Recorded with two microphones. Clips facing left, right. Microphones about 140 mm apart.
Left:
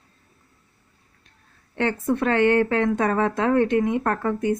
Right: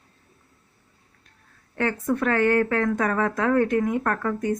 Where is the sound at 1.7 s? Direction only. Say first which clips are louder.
Left 1 dB; 25° left (ahead or behind).